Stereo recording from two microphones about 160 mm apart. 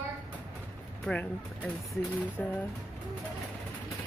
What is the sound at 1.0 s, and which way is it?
Speech, 10° left (ahead or behind).